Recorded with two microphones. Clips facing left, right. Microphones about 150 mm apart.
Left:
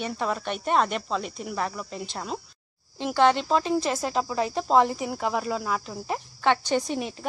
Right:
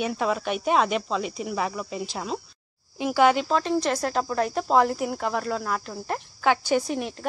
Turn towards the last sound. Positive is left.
turn(degrees=0)  # may be behind; listen again after turning